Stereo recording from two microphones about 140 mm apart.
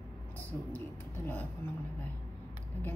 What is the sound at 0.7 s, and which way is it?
Speech, 15° left (ahead or behind).